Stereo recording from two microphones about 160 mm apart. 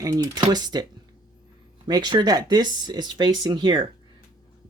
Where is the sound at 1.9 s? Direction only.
25° right (ahead or behind).